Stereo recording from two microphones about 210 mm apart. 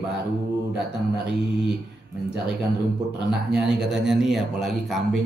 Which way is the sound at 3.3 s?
5° right (ahead or behind).